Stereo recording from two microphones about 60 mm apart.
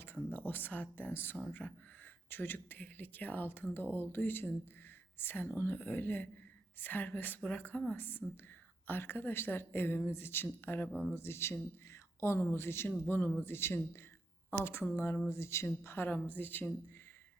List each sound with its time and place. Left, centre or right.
0.3 s a woman's voice: left
1.6 s speech: centre
2.3 s a woman's voice: left
11.1 s a woman's voice: left
16.0 s a woman's voice: left